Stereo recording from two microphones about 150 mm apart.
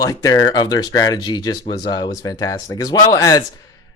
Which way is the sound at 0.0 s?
25° left (ahead or behind).